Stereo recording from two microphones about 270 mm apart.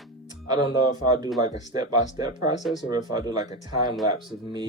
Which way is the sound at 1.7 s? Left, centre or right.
Centre.